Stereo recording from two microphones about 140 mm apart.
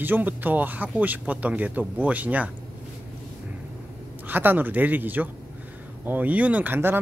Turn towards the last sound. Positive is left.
turn(degrees=-15)  # may be behind; listen again after turning